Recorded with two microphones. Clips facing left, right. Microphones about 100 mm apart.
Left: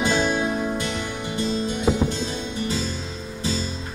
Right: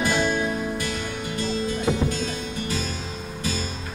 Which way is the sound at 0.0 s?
25° left (ahead or behind).